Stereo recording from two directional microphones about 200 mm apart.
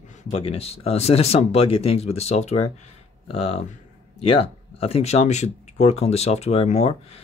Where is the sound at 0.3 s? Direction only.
30° left (ahead or behind).